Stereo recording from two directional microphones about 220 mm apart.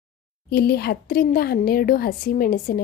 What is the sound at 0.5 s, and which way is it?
Speech, 45° left (ahead or behind).